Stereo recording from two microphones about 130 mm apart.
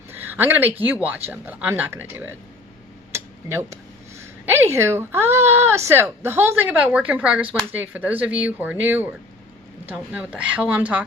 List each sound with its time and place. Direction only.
0.1 s speech: 15° right (ahead or behind)
3.1 s a sound: 20° right (ahead or behind)
4.2 s speech: 20° right (ahead or behind)